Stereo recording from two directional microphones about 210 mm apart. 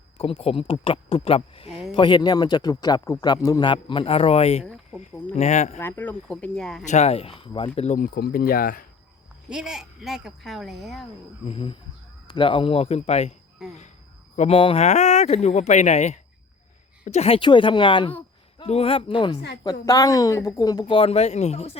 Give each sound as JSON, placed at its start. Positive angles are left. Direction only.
{"t": 0.2, "sound": "a man's voice", "side_deg": 25}
{"t": 4.6, "sound": "speech", "side_deg": -5}
{"t": 4.9, "sound": "speech", "side_deg": 30}
{"t": 5.8, "sound": "speech", "side_deg": 10}
{"t": 6.8, "sound": "speech", "side_deg": 30}
{"t": 9.5, "sound": "speech", "side_deg": -5}
{"t": 11.4, "sound": "a man's voice", "side_deg": 25}
{"t": 13.6, "sound": "speech", "side_deg": 0}
{"t": 14.3, "sound": "a man's voice", "side_deg": 30}
{"t": 20.9, "sound": "a man's voice", "side_deg": 30}